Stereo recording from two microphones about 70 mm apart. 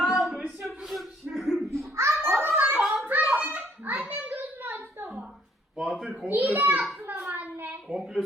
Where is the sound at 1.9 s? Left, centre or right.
Right.